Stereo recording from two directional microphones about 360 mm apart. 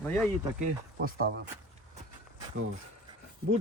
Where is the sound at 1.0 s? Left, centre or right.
Right.